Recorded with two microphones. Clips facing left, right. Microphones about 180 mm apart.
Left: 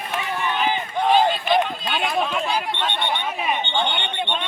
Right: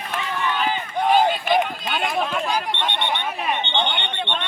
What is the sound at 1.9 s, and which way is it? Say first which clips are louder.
Alarm: even; centre (ahead or behind).